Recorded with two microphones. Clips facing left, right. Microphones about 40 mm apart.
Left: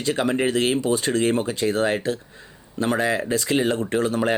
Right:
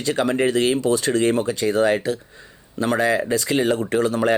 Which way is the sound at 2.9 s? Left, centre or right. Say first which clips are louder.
Right 3 dB; centre.